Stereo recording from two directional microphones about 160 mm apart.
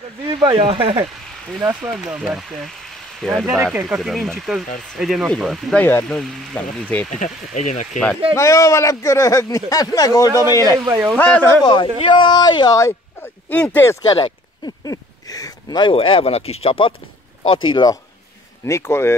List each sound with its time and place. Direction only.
0.4 s speech: 30° right (ahead or behind)
1.6 s speech: 5° right (ahead or behind)
7.5 s speech: 50° left (ahead or behind)
8.4 s speech: 20° left (ahead or behind)
10.9 s speech: 15° right (ahead or behind)
11.1 s speech: 10° left (ahead or behind)
11.6 s speech: 30° left (ahead or behind); by 13.9 s 10° left (ahead or behind)
14.0 s speech: 25° left (ahead or behind)
18.7 s speech: 15° left (ahead or behind)